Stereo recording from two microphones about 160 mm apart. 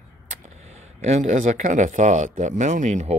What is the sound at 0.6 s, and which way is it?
Speech, 45° right (ahead or behind).